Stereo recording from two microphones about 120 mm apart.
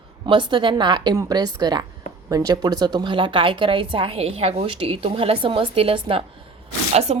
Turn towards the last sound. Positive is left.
turn(degrees=-65)  # may be behind; listen again after turning